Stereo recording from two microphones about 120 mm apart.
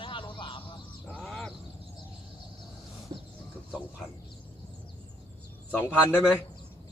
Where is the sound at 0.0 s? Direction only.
45° left (ahead or behind).